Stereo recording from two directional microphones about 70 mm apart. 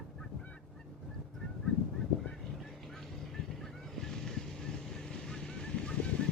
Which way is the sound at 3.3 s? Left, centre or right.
Centre.